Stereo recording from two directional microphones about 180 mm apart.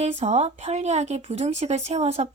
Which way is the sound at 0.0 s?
40° right (ahead or behind).